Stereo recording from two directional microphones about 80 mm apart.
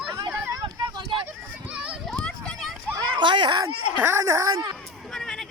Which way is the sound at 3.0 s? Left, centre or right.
Right.